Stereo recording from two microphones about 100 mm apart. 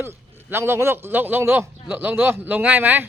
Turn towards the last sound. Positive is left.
turn(degrees=-20)  # may be behind; listen again after turning